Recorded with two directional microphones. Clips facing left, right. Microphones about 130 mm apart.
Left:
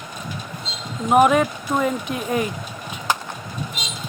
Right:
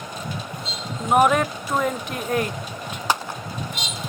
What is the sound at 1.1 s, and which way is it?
Speech, centre (ahead or behind).